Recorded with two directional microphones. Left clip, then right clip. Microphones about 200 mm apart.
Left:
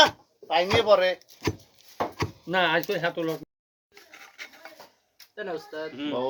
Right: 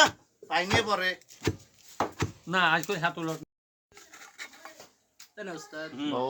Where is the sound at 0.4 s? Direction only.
40° right (ahead or behind).